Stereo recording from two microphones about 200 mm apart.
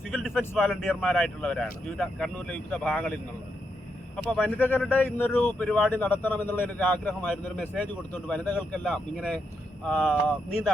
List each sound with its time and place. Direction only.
0.1 s speech: centre (ahead or behind)
4.3 s speech: 5° left (ahead or behind)